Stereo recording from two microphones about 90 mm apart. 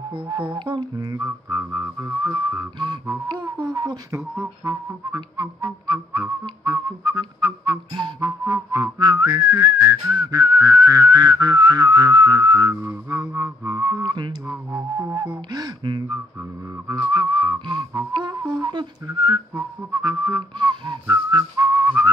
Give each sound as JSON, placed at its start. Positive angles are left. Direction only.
{"t": 0.1, "sound": "speech", "side_deg": -70}
{"t": 0.6, "sound": "whistling", "side_deg": -60}
{"t": 1.6, "sound": "music", "side_deg": -25}
{"t": 2.8, "sound": "whistling", "side_deg": -55}
{"t": 4.1, "sound": "whistling", "side_deg": -30}
{"t": 13.4, "sound": "music", "side_deg": -35}
{"t": 14.0, "sound": "whistling", "side_deg": -60}
{"t": 14.5, "sound": "music", "side_deg": -30}
{"t": 15.5, "sound": "whistling", "side_deg": -55}
{"t": 17.1, "sound": "whistling", "side_deg": -55}
{"t": 21.4, "sound": "music", "side_deg": -40}
{"t": 21.8, "sound": "whistling", "side_deg": -30}